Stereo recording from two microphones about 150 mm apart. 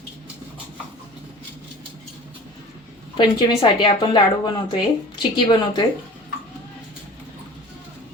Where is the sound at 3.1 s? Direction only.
30° left (ahead or behind).